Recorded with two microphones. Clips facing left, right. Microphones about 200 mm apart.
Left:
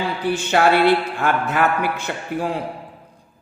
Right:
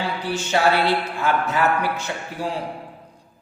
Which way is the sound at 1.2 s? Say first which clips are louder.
Left 1 dB; 55° left (ahead or behind).